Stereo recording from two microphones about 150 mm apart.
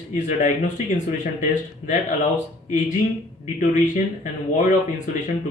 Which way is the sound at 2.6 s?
55° left (ahead or behind).